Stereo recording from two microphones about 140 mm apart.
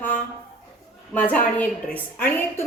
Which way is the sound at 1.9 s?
15° left (ahead or behind).